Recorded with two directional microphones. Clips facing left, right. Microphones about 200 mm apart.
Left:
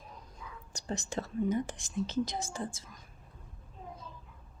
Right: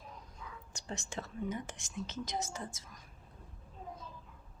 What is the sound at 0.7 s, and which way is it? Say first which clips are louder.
Speech: left 7 dB; 35° left (ahead or behind).